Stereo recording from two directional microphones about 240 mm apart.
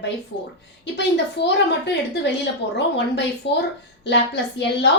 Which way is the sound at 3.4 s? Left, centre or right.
Left.